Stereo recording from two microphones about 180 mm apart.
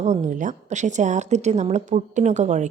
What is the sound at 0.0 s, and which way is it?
A woman's voice, 40° right (ahead or behind).